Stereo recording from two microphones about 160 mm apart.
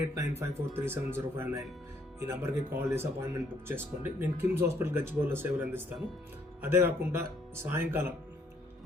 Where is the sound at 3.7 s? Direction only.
10° right (ahead or behind).